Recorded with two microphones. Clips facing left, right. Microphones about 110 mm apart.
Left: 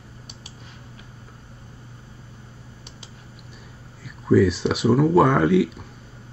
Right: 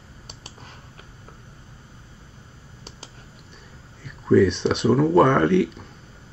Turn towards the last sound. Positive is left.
turn(degrees=5)  # may be behind; listen again after turning